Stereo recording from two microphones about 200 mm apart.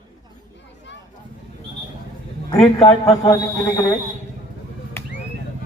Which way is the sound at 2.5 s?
25° left (ahead or behind).